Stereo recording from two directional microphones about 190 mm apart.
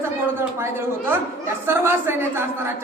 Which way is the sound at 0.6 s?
10° right (ahead or behind).